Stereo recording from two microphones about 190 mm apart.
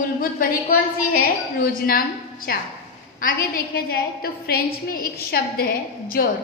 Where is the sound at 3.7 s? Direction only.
55° left (ahead or behind).